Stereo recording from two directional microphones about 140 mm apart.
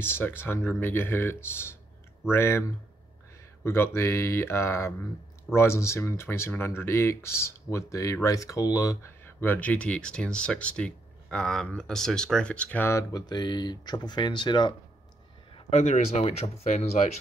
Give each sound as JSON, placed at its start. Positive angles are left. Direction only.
{"t": 0.0, "sound": "speech", "side_deg": 15}
{"t": 3.6, "sound": "speech", "side_deg": 15}
{"t": 13.1, "sound": "speech", "side_deg": 30}
{"t": 15.5, "sound": "speech", "side_deg": 55}